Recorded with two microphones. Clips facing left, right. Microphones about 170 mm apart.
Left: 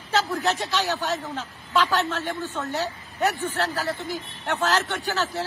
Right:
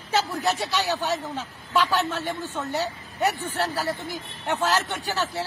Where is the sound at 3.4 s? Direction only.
10° right (ahead or behind).